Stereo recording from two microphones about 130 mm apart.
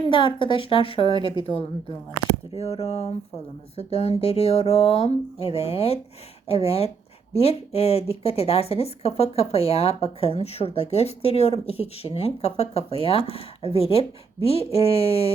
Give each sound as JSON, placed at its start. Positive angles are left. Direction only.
{"t": 0.1, "sound": "a woman's voice", "side_deg": 40}
{"t": 2.6, "sound": "speech", "side_deg": 50}